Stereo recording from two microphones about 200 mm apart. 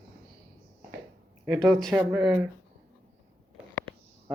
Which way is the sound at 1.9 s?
10° right (ahead or behind).